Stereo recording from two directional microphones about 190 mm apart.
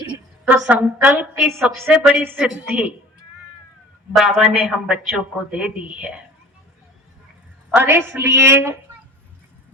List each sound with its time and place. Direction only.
0.4 s a woman's voice: 5° right (ahead or behind)
4.1 s a woman's voice: centre (ahead or behind)
7.7 s a woman's voice: 10° right (ahead or behind)